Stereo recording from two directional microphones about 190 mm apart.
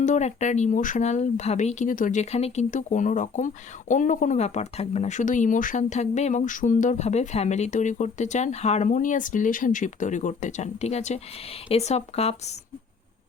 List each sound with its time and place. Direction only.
0.0 s speech: 40° left (ahead or behind)